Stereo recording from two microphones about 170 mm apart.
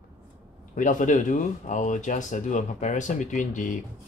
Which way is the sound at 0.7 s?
50° left (ahead or behind).